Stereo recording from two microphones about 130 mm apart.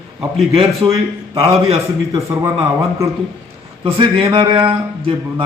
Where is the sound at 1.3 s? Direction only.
50° right (ahead or behind).